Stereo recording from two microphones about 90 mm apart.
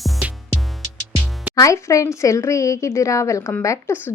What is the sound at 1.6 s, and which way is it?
A woman's voice, 35° left (ahead or behind).